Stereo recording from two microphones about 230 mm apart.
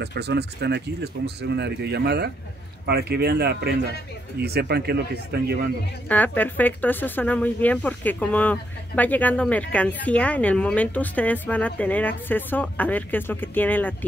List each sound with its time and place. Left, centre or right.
0.0 s speech: right
6.0 s speech: centre